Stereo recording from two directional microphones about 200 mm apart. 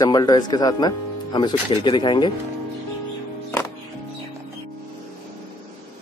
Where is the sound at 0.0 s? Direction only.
20° left (ahead or behind).